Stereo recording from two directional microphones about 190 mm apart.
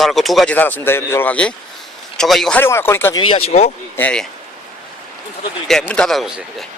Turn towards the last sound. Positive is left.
turn(degrees=0)  # may be behind; listen again after turning